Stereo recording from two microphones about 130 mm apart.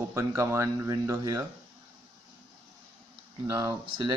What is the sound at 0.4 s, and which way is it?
Speech, 20° right (ahead or behind).